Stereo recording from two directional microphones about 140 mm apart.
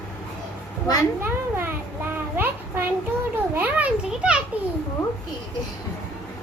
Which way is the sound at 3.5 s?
10° right (ahead or behind).